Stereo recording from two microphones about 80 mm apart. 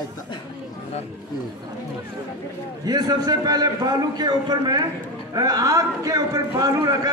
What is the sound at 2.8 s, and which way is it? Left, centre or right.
A man's voice, right.